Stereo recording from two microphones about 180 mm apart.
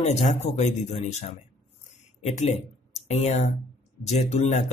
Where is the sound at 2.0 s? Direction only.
40° left (ahead or behind).